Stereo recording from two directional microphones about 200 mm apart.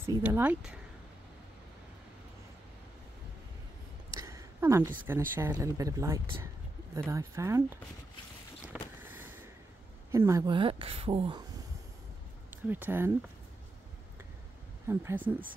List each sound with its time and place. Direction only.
0.0 s speech: 10° right (ahead or behind)
4.1 s speech: 15° right (ahead or behind)
9.0 s vehicle: 10° right (ahead or behind)
10.1 s speech: 15° right (ahead or behind)
12.6 s speech: 10° right (ahead or behind)
14.9 s speech: 10° right (ahead or behind)